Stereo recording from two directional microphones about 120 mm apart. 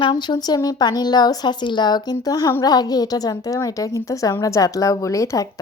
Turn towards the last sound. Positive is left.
turn(degrees=25)  # may be behind; listen again after turning